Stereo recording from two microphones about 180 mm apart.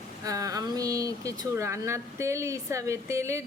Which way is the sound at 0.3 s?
20° right (ahead or behind).